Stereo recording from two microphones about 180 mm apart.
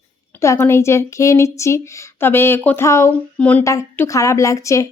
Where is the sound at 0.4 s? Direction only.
15° left (ahead or behind).